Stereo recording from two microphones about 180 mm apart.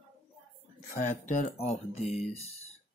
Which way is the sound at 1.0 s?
40° left (ahead or behind).